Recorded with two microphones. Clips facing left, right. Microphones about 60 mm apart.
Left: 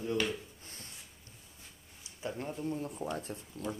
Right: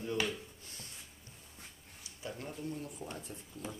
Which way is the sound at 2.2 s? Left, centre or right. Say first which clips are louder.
Left 5 dB; left.